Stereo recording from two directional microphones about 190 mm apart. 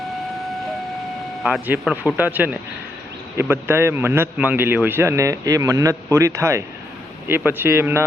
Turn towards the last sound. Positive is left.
turn(degrees=-15)  # may be behind; listen again after turning